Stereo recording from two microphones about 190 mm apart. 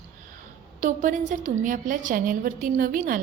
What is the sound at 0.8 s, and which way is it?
A woman's voice, 40° right (ahead or behind).